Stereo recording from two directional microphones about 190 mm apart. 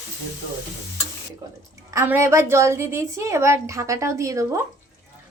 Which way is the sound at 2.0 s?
15° right (ahead or behind).